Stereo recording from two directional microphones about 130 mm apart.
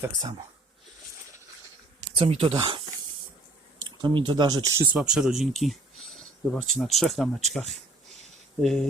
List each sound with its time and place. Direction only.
0.0 s speech: 30° right (ahead or behind)
2.1 s speech: 45° right (ahead or behind)
3.8 s speech: 35° right (ahead or behind)
4.8 s speech: 15° right (ahead or behind)
5.0 s speech: 5° right (ahead or behind)